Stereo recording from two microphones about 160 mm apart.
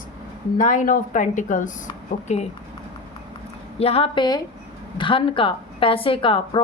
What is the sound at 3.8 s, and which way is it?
A woman's voice, 40° left (ahead or behind).